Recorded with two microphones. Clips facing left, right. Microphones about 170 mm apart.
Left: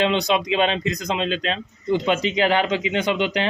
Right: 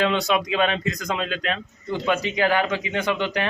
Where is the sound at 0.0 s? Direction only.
20° left (ahead or behind).